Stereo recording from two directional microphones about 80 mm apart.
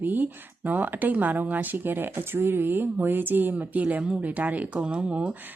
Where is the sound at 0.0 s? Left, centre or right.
Right.